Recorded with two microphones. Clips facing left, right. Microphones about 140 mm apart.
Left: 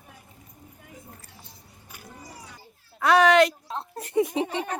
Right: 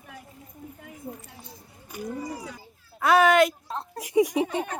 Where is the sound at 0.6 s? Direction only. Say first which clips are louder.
Right 8 dB; 90° right.